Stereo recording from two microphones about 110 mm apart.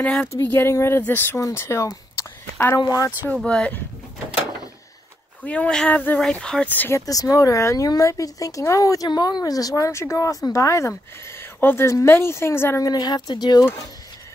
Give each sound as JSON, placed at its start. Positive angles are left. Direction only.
{"t": 0.0, "sound": "speech", "side_deg": 10}
{"t": 0.3, "sound": "speech", "side_deg": 20}
{"t": 2.8, "sound": "speech", "side_deg": 30}
{"t": 3.4, "sound": "speech", "side_deg": 10}
{"t": 5.4, "sound": "speech", "side_deg": 10}
{"t": 7.1, "sound": "speech", "side_deg": 30}
{"t": 12.8, "sound": "speech", "side_deg": 40}